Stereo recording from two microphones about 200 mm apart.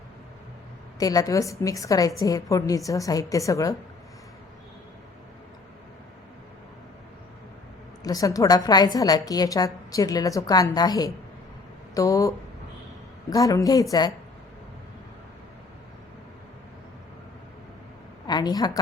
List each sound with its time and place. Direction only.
0.9 s a woman's voice: 20° left (ahead or behind)
8.0 s a woman's voice: 15° left (ahead or behind)
13.3 s a woman's voice: 15° left (ahead or behind)
18.3 s speech: 20° left (ahead or behind)